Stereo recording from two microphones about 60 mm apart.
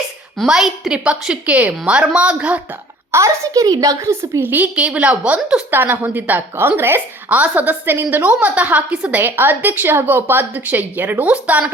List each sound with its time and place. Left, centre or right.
0.4 s a woman's voice: centre
3.1 s a child's voice: right
4.4 s a woman's voice: right
4.7 s a woman's voice: centre
5.7 s a woman's voice: right
7.3 s a woman's voice: right